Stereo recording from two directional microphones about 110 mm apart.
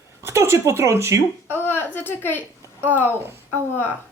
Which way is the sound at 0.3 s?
25° right (ahead or behind).